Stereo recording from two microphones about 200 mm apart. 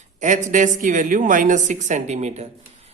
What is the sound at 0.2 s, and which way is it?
Speech, 40° right (ahead or behind).